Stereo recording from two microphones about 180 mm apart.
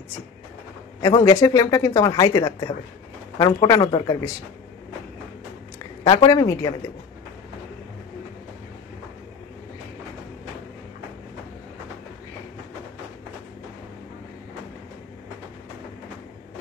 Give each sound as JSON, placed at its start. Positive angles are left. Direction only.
{"t": 1.0, "sound": "speech", "side_deg": 25}
{"t": 6.0, "sound": "speech", "side_deg": 20}